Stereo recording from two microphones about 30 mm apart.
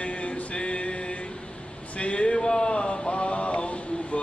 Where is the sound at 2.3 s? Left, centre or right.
Left.